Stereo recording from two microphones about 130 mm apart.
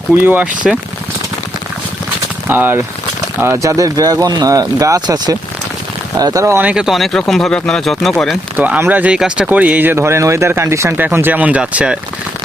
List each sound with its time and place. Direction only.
0.2 s speech: 15° right (ahead or behind)
2.5 s speech: 15° right (ahead or behind); by 8.1 s 5° left (ahead or behind)
8.5 s speech: 15° right (ahead or behind)